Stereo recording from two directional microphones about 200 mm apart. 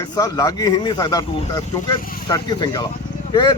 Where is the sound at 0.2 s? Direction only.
20° left (ahead or behind).